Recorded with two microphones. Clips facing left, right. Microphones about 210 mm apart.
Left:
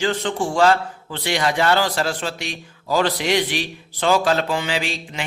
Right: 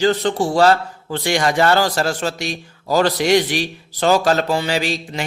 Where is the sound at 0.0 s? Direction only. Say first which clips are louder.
Right 5 dB; 40° right (ahead or behind).